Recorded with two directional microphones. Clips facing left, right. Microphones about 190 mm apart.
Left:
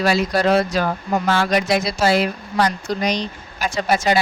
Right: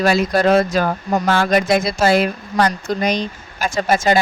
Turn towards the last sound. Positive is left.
turn(degrees=-45)  # may be behind; listen again after turning